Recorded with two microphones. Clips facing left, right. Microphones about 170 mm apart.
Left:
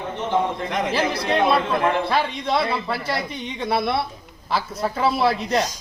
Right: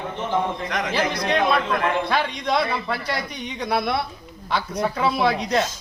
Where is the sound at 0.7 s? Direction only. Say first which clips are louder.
Left 2 dB; 30° left (ahead or behind).